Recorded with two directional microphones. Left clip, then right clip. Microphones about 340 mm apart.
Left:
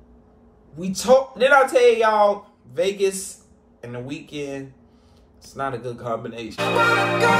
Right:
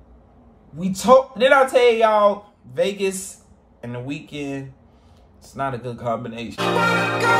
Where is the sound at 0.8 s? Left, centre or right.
Centre.